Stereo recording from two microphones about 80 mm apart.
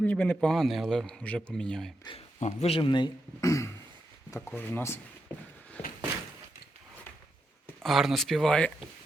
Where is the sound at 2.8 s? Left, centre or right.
Left.